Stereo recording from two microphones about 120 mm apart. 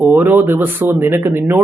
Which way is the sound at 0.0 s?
15° right (ahead or behind).